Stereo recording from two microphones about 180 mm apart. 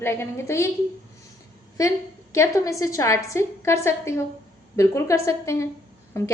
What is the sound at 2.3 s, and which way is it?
A woman's voice, 15° left (ahead or behind).